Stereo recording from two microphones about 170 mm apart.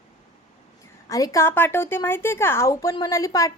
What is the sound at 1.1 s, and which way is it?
A woman's voice, 20° left (ahead or behind).